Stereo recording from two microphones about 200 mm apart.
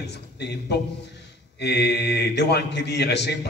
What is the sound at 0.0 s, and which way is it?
A man's voice, 55° left (ahead or behind).